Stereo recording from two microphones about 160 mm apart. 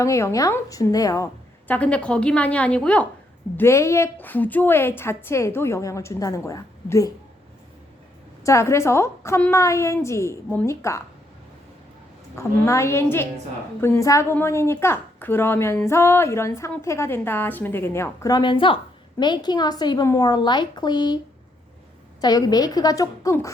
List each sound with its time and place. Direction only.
0.0 s a woman's voice: 20° left (ahead or behind)
1.6 s a woman's voice: 10° left (ahead or behind)
8.4 s a woman's voice: 15° left (ahead or behind)
12.4 s a woman's voice: 20° left (ahead or behind)
22.2 s a woman's voice: 25° left (ahead or behind)